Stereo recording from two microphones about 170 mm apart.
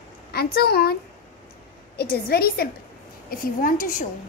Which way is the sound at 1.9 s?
65° left (ahead or behind).